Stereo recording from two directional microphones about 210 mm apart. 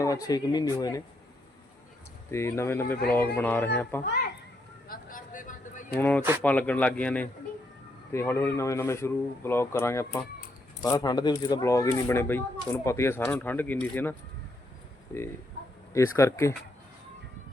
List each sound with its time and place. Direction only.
0.0 s speech: 15° left (ahead or behind)
2.3 s speech: 10° left (ahead or behind)
4.9 s a sound: 40° left (ahead or behind)
5.9 s speech: 10° left (ahead or behind)
15.9 s speech: 15° left (ahead or behind)